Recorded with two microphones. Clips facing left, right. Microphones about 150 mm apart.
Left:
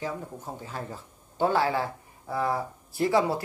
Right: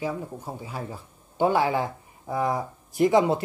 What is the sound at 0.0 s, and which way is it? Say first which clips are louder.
Speech: right 3 dB; 10° right (ahead or behind).